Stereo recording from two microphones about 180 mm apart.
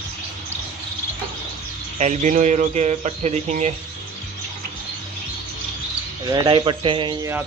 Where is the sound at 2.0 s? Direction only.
40° right (ahead or behind).